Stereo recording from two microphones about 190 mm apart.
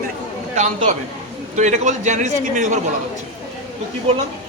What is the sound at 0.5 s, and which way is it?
A man's voice, 35° right (ahead or behind).